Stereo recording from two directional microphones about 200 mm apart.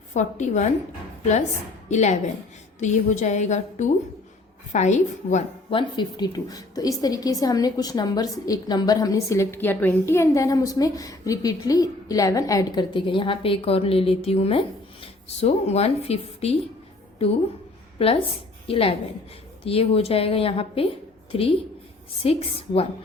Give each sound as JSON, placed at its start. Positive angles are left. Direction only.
{"t": 0.1, "sound": "a woman's voice", "side_deg": 35}
{"t": 1.9, "sound": "a woman's voice", "side_deg": 35}
{"t": 6.0, "sound": "a woman's voice", "side_deg": 20}
{"t": 18.0, "sound": "a woman's voice", "side_deg": 30}